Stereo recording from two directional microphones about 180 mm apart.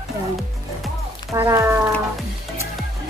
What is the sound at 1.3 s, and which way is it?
Speech, 15° right (ahead or behind).